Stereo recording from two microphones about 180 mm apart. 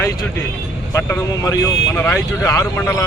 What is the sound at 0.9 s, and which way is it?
Speech, 15° left (ahead or behind).